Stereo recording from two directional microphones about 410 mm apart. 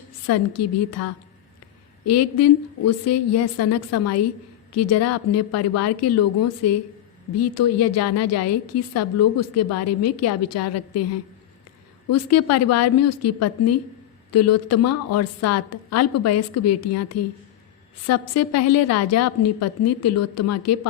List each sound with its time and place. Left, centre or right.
0.3 s a woman's voice: left
12.1 s a woman's voice: left